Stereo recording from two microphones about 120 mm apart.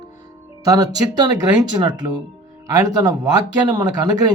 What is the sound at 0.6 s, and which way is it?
Speech, 30° right (ahead or behind).